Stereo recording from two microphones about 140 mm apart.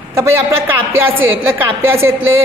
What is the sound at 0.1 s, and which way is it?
A woman's voice, 20° right (ahead or behind).